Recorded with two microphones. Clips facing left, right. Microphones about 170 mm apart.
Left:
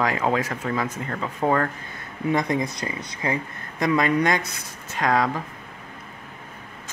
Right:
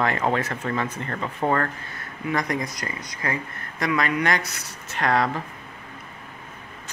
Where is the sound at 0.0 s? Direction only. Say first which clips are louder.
Left 1 dB; 10° left (ahead or behind).